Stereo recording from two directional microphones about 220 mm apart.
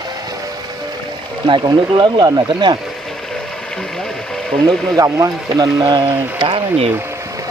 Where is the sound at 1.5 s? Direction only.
20° right (ahead or behind).